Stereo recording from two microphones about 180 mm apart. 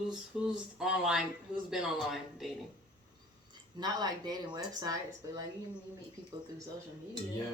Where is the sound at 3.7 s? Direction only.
20° right (ahead or behind).